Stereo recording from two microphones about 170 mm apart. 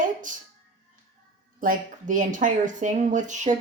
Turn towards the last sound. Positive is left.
turn(degrees=-45)  # may be behind; listen again after turning